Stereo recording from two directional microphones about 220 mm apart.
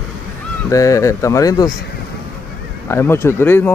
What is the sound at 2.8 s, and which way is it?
Speech, 10° left (ahead or behind).